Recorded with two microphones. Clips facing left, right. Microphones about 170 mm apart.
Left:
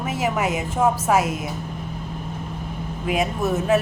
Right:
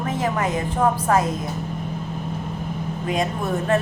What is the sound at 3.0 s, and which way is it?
Speech, 5° left (ahead or behind).